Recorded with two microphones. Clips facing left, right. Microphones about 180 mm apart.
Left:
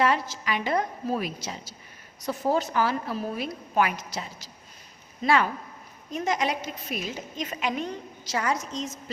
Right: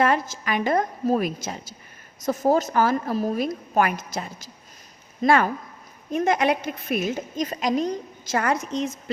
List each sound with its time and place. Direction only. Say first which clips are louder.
0.0 s a woman's voice: right 3 dB; 50° right (ahead or behind)